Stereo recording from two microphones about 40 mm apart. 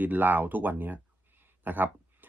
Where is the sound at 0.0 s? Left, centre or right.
Right.